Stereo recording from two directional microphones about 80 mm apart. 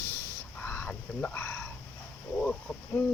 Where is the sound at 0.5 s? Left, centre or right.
Left.